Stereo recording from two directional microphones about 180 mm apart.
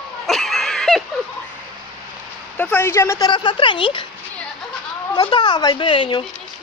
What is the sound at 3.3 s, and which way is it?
Speech, 30° left (ahead or behind).